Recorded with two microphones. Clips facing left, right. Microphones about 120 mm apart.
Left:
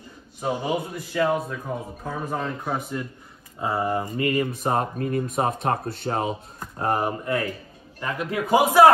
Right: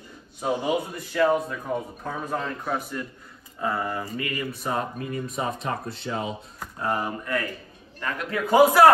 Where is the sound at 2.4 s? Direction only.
10° left (ahead or behind).